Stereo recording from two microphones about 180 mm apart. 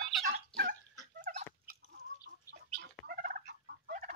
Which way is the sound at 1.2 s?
45° right (ahead or behind).